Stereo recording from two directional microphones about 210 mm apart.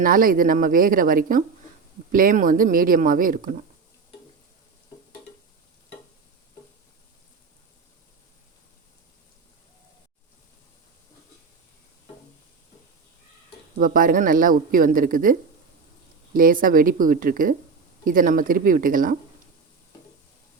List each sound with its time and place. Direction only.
0.0 s speech: 40° right (ahead or behind)
13.7 s speech: 40° right (ahead or behind)